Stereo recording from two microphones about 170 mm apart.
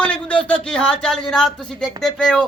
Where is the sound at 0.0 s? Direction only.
5° left (ahead or behind).